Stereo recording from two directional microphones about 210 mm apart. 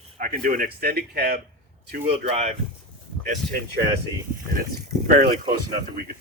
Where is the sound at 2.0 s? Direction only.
30° right (ahead or behind).